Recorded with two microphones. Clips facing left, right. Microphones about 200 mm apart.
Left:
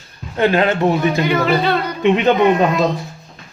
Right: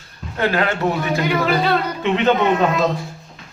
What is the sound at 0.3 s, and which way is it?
Speech, 20° left (ahead or behind).